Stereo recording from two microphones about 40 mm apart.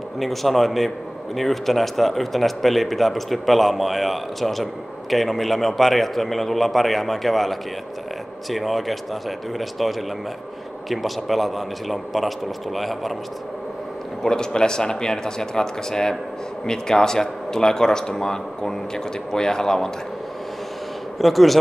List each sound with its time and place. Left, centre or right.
0.2 s a man's voice: centre
14.2 s speech: centre
21.2 s a man's voice: centre